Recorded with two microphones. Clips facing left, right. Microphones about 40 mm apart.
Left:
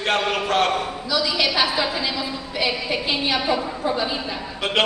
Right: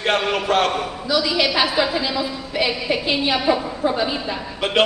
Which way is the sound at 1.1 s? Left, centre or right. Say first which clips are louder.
Right 2 dB; right.